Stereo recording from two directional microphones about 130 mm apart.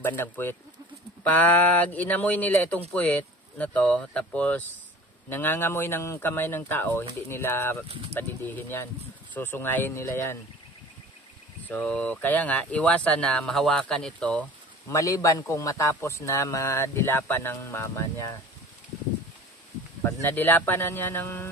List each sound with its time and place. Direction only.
0.0 s speech: 15° left (ahead or behind)
11.6 s speech: 10° left (ahead or behind)
14.9 s a man's voice: 25° left (ahead or behind)
20.0 s speech: 20° left (ahead or behind)